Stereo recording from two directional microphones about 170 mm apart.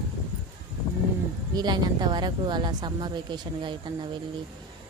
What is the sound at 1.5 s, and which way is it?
Speech, 25° right (ahead or behind).